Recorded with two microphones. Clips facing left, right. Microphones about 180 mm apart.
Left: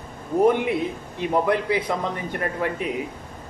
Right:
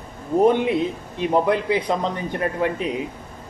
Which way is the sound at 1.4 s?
20° right (ahead or behind).